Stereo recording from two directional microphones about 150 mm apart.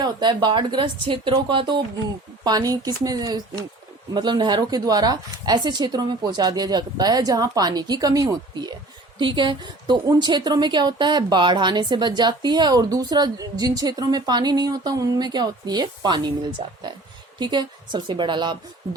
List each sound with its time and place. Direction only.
0.0 s speech: 30° right (ahead or behind)
17.4 s speech: 30° right (ahead or behind)